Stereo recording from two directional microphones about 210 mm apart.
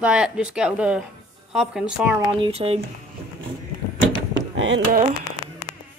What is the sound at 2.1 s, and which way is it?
Speech, 25° right (ahead or behind).